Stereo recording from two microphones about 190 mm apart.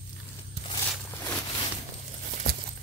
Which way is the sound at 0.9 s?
10° left (ahead or behind).